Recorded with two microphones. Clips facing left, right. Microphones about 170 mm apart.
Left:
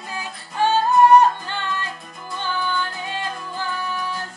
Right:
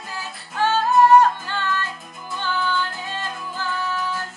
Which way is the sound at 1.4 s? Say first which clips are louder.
Right 2 dB; 20° left (ahead or behind).